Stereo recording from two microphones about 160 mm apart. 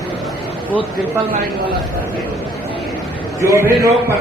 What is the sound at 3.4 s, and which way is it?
Speech, 15° right (ahead or behind).